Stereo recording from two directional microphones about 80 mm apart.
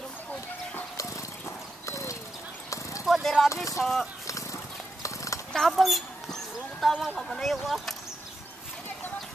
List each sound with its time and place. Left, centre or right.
1.4 s horse: left
3.1 s vehicle: centre
3.7 s speech: centre
4.3 s horse: left
5.5 s a sound: centre
7.3 s speech: centre